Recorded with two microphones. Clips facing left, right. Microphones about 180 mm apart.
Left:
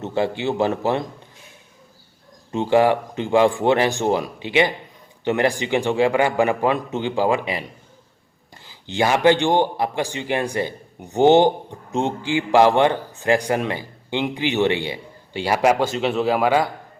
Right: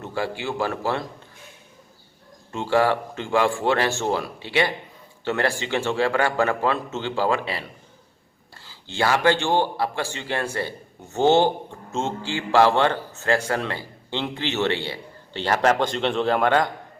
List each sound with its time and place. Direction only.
0.0 s speech: 20° left (ahead or behind)
2.5 s speech: 20° left (ahead or behind)